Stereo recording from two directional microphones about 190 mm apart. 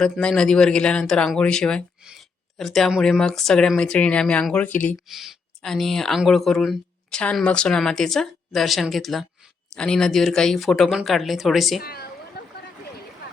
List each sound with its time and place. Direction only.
0.0 s speech: 5° left (ahead or behind)
11.8 s a woman's voice: 55° left (ahead or behind)
12.4 s a sound: 60° left (ahead or behind)